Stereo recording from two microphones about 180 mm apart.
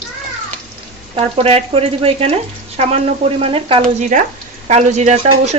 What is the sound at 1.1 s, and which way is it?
Speech, 35° right (ahead or behind).